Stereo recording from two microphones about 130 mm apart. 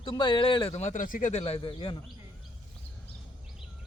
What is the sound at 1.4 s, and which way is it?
Speech, 45° left (ahead or behind).